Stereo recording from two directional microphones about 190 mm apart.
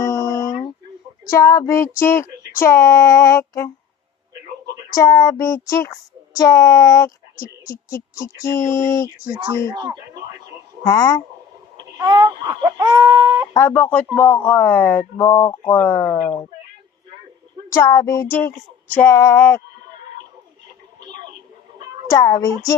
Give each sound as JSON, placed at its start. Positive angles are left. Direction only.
{"t": 0.0, "sound": "a sound", "side_deg": 20}
{"t": 1.3, "sound": "speech", "side_deg": 15}
{"t": 4.9, "sound": "speech", "side_deg": 20}
{"t": 8.2, "sound": "speech", "side_deg": 15}
{"t": 9.6, "sound": "a sound", "side_deg": -20}
{"t": 10.8, "sound": "speech", "side_deg": 20}
{"t": 11.9, "sound": "a sound", "side_deg": -20}
{"t": 13.5, "sound": "speech", "side_deg": 10}
{"t": 17.7, "sound": "speech", "side_deg": 15}
{"t": 22.1, "sound": "speech", "side_deg": 20}